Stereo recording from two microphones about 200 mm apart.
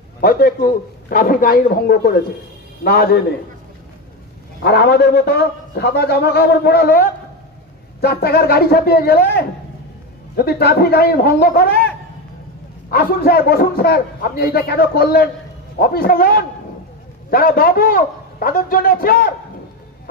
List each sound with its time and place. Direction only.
0.2 s a man's voice: 45° left (ahead or behind)
4.6 s a man's voice: 55° left (ahead or behind)
12.9 s a man's voice: 50° left (ahead or behind)